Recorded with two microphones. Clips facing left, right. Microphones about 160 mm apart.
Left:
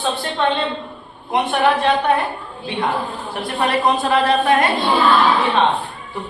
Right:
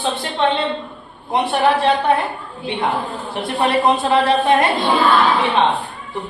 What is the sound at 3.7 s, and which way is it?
Speech, 25° right (ahead or behind).